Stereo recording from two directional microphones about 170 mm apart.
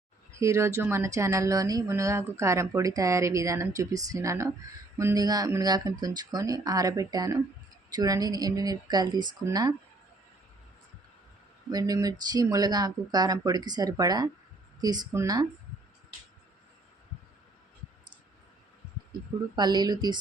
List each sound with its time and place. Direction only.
0.3 s speech: 15° right (ahead or behind)
11.7 s speech: 20° right (ahead or behind)
19.5 s speech: 25° right (ahead or behind)